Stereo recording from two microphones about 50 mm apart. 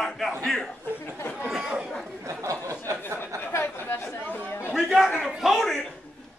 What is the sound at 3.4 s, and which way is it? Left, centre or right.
Chatter, left.